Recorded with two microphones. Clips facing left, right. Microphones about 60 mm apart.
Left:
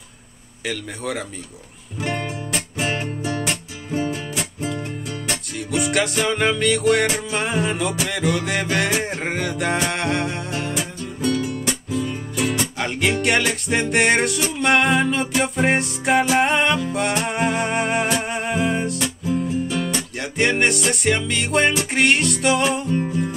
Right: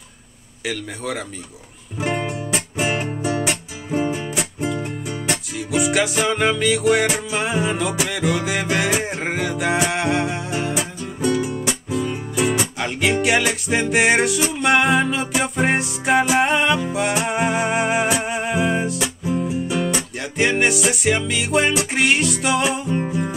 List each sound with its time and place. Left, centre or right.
0.7 s music: centre
5.6 s music: centre
12.7 s music: centre
20.2 s music: centre